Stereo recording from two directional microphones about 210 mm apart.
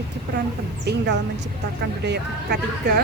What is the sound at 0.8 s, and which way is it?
Speech, 50° right (ahead or behind).